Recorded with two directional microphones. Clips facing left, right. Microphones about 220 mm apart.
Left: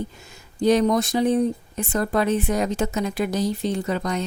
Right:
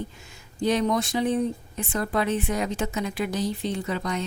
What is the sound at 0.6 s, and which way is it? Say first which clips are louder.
Speech: left 5 dB; 40° left (ahead or behind).